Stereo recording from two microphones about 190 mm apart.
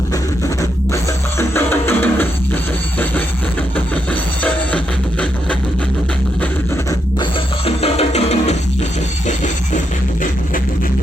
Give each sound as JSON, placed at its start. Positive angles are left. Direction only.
{"t": 1.4, "sound": "music", "side_deg": 10}
{"t": 3.8, "sound": "music", "side_deg": 5}
{"t": 7.2, "sound": "music", "side_deg": 30}